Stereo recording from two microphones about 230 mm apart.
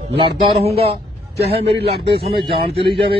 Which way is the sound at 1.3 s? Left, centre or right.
Right.